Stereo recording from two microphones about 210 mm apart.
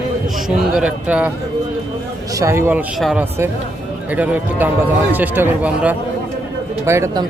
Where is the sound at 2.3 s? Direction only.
15° right (ahead or behind).